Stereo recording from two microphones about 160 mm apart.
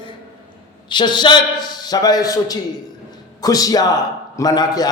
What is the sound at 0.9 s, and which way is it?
A man's voice, 25° left (ahead or behind).